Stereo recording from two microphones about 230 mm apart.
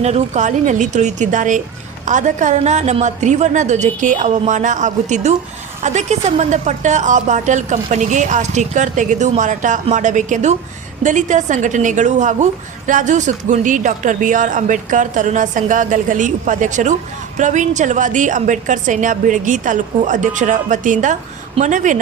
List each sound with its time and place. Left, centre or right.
0.0 s speech: right